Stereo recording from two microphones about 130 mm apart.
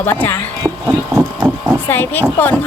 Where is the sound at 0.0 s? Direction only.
15° left (ahead or behind).